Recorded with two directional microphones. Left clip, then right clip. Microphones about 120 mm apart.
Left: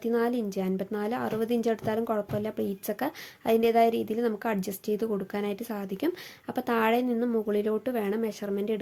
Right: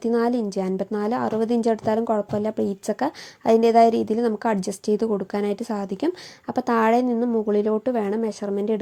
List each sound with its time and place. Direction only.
0.0 s speech: 40° right (ahead or behind)